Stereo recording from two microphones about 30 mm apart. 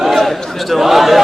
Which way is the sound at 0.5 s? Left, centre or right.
Centre.